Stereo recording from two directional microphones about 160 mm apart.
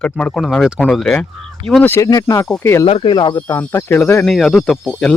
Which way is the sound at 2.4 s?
5° left (ahead or behind).